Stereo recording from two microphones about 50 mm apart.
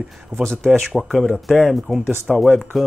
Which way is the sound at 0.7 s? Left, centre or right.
Centre.